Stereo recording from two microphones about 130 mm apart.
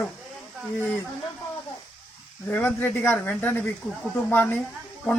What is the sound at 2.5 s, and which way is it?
Speech, 15° left (ahead or behind).